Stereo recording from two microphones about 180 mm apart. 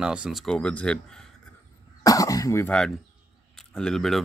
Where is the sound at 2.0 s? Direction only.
20° left (ahead or behind); by 4.2 s centre (ahead or behind).